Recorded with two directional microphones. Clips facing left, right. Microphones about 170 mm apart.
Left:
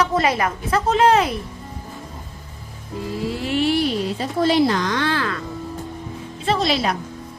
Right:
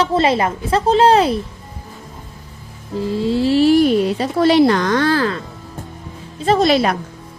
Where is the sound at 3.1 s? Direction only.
30° right (ahead or behind); by 3.9 s 45° right (ahead or behind).